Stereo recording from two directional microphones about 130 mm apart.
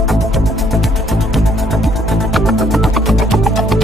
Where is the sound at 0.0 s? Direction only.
Centre (ahead or behind).